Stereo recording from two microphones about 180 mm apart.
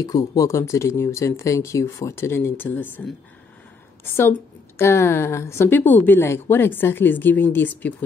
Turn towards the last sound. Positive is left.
turn(degrees=10)  # may be behind; listen again after turning